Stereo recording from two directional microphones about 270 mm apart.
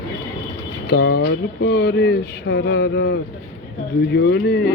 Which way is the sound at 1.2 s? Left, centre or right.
Left.